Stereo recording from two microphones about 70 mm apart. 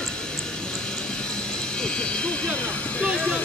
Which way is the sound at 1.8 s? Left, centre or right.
Centre.